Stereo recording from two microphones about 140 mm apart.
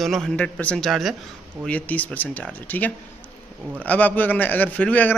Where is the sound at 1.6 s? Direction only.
10° left (ahead or behind).